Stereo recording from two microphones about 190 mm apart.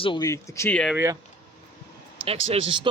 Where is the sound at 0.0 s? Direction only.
25° left (ahead or behind); by 0.9 s 5° left (ahead or behind).